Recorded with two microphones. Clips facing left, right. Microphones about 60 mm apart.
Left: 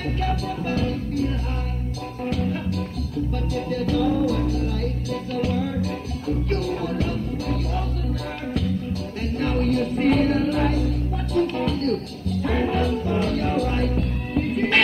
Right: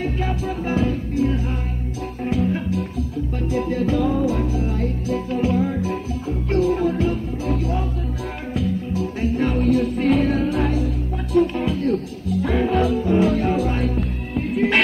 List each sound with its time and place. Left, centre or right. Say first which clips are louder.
0.0 s music: right 2 dB; centre